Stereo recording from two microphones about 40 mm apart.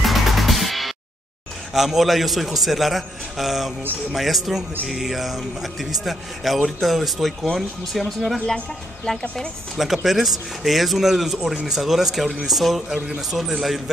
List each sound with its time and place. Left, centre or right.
0.0 s music: centre
1.7 s speech: centre
10.0 s speech: centre
13.0 s a man's voice: centre
13.4 s speech: centre